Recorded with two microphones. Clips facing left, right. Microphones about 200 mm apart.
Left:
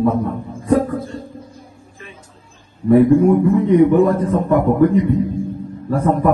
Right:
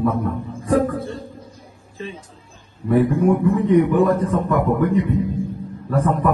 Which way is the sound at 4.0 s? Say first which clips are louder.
Left 3 dB; 30° left (ahead or behind).